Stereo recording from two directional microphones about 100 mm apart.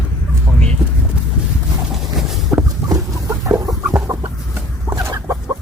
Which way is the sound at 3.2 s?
25° right (ahead or behind).